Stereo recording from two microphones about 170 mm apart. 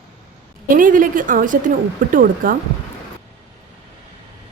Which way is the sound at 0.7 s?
50° right (ahead or behind).